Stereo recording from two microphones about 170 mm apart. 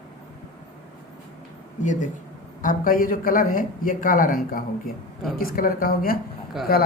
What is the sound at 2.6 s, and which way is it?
Speech, 55° left (ahead or behind).